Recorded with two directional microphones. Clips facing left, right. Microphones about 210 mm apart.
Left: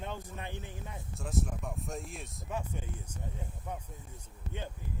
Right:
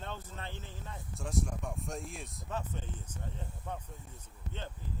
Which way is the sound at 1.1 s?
Centre (ahead or behind).